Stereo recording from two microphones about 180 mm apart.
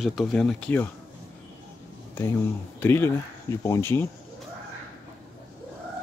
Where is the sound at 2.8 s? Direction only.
15° left (ahead or behind).